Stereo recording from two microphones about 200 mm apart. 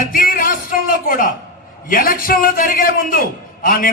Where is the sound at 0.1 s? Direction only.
45° left (ahead or behind).